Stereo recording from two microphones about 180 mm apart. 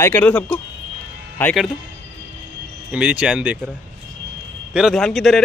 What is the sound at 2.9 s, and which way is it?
Speech, 5° right (ahead or behind).